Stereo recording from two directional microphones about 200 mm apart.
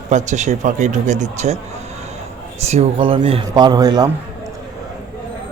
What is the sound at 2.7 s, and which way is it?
Speech, 30° right (ahead or behind).